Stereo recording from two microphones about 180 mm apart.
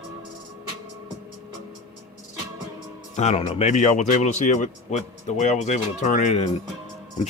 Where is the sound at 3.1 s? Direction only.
40° left (ahead or behind).